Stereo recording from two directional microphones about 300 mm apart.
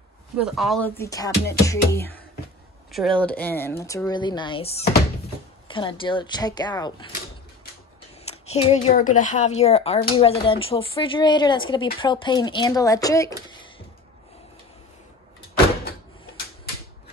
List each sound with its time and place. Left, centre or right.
0.4 s speech: centre
8.3 s speech: centre